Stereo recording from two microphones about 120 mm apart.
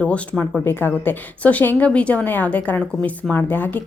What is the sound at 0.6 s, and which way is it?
A woman's voice, 15° left (ahead or behind).